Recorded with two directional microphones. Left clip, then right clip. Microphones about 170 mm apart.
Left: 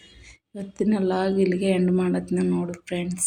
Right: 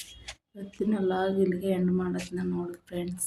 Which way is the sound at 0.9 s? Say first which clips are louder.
Left 4 dB; 20° left (ahead or behind).